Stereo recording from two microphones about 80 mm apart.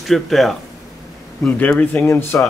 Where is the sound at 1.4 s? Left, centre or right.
Centre.